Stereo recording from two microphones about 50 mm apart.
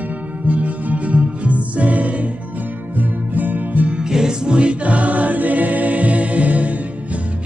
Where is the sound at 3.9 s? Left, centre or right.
Centre.